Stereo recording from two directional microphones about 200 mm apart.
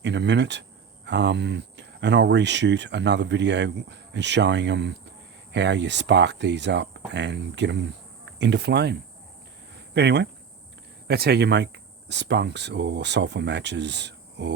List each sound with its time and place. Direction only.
0.0 s speech: 60° right (ahead or behind)
9.7 s a sound: 55° right (ahead or behind)
11.1 s speech: 55° right (ahead or behind)